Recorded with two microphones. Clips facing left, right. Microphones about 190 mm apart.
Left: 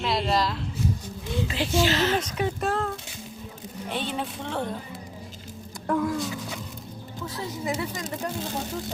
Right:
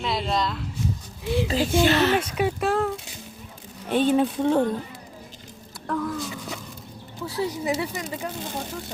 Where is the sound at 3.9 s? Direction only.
45° right (ahead or behind).